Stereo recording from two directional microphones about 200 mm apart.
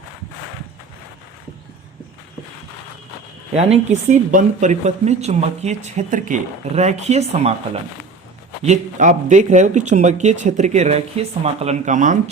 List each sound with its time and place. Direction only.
3.5 s speech: 30° right (ahead or behind)
8.6 s speech: 35° right (ahead or behind)